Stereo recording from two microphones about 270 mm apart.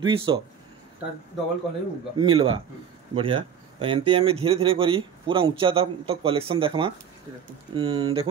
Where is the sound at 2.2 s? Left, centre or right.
Centre.